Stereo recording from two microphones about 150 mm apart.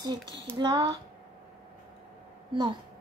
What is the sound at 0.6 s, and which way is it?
Speech, 30° right (ahead or behind).